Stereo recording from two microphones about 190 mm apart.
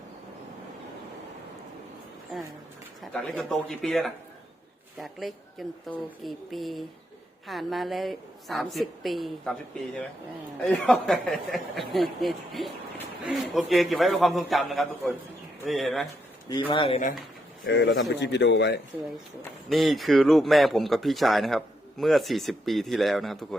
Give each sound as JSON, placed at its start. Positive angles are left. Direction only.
{"t": 3.0, "sound": "speech", "side_deg": 5}
{"t": 16.5, "sound": "speech", "side_deg": 25}
{"t": 17.7, "sound": "a man's voice", "side_deg": 70}
{"t": 19.7, "sound": "speech", "side_deg": 0}